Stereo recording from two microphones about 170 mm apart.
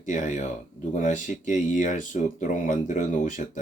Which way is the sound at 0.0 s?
50° left (ahead or behind).